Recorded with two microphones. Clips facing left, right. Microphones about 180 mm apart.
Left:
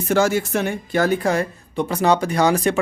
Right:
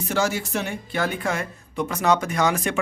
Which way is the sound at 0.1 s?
55° left (ahead or behind).